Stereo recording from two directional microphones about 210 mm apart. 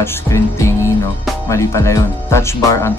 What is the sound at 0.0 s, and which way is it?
Music, 15° left (ahead or behind).